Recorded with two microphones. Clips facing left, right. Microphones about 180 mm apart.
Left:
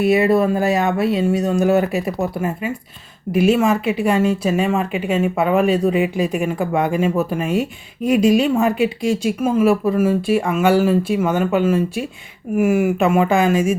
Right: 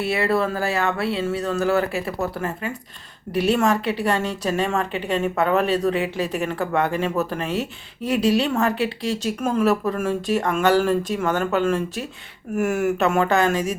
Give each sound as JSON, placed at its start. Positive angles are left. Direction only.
{"t": 0.0, "sound": "a woman's voice", "side_deg": 15}